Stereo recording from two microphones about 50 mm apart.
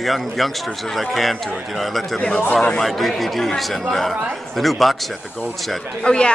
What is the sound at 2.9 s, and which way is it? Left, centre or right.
A man's voice, centre.